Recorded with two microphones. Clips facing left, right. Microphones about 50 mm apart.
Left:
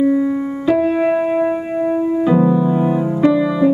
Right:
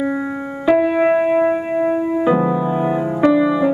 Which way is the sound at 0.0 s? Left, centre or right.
Right.